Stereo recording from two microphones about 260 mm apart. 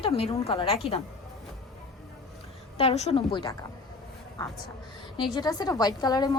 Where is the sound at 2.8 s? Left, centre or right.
Left.